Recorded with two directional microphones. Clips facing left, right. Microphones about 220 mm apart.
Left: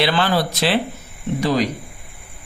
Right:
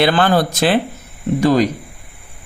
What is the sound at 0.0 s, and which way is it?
Speech, 50° right (ahead or behind).